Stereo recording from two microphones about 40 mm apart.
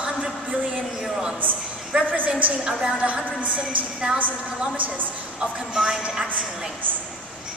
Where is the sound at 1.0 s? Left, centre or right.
Centre.